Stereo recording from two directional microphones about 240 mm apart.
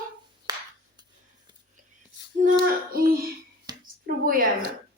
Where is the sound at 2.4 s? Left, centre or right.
Right.